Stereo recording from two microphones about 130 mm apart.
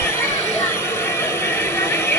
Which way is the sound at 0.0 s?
20° left (ahead or behind).